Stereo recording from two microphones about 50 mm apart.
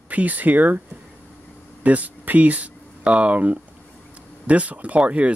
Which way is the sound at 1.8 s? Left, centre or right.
Right.